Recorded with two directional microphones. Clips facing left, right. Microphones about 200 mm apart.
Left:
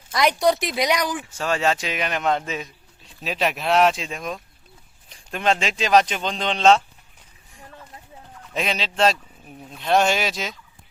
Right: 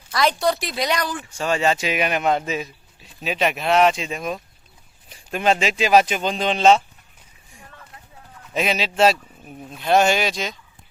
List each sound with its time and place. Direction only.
0.1 s speech: 20° left (ahead or behind)
1.3 s a man's voice: centre (ahead or behind)
8.5 s a man's voice: 5° right (ahead or behind)